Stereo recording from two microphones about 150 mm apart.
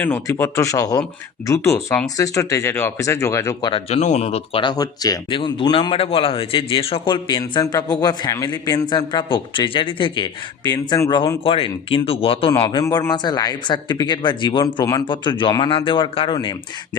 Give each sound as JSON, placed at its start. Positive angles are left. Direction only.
{"t": 0.0, "sound": "speech", "side_deg": 15}
{"t": 3.7, "sound": "a man's voice", "side_deg": 40}
{"t": 12.8, "sound": "speech", "side_deg": 25}